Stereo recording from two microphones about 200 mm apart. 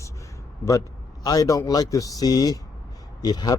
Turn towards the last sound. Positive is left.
turn(degrees=20)  # may be behind; listen again after turning